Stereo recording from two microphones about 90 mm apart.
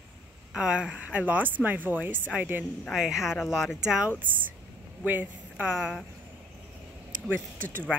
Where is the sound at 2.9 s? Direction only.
5° right (ahead or behind).